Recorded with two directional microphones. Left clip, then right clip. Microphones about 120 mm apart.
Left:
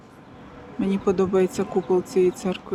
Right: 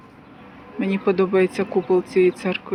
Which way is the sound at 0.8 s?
15° left (ahead or behind).